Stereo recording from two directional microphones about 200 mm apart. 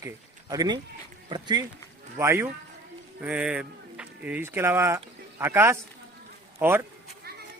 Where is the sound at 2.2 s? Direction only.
10° right (ahead or behind).